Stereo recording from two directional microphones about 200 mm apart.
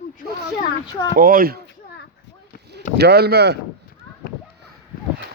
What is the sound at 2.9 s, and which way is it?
Speech, 55° right (ahead or behind).